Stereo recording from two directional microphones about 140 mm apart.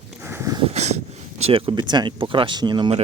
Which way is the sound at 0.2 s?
15° right (ahead or behind).